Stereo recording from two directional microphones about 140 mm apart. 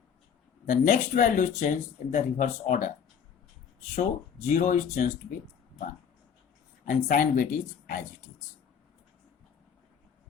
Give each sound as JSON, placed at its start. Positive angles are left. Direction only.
{"t": 0.7, "sound": "speech", "side_deg": 70}
{"t": 3.9, "sound": "speech", "side_deg": 55}
{"t": 6.8, "sound": "speech", "side_deg": 75}